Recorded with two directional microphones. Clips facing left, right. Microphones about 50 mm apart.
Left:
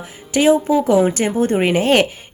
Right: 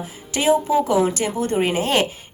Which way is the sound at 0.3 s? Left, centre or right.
Left.